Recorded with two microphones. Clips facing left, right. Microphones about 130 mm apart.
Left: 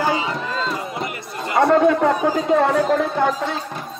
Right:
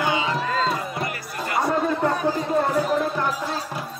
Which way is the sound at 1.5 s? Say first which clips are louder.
Left 8 dB; 80° left.